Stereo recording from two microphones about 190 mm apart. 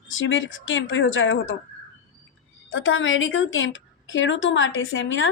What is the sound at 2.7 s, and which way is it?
A woman's voice, 90° left.